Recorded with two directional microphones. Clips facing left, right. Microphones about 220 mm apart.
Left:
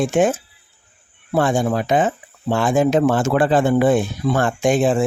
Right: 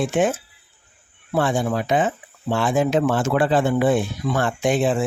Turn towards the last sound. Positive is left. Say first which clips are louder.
# left 3 dB
turn(degrees=45)  # may be behind; listen again after turning